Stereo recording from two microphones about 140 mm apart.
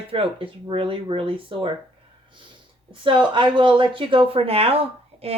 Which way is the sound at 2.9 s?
35° right (ahead or behind).